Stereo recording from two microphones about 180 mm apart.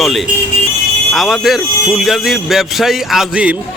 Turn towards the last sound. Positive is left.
turn(degrees=-5)  # may be behind; listen again after turning